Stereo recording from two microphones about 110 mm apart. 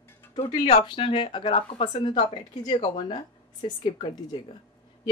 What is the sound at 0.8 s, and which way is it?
A woman's voice, 50° left (ahead or behind).